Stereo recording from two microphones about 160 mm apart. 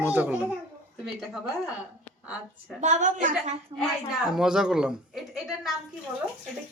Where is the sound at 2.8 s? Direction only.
50° right (ahead or behind).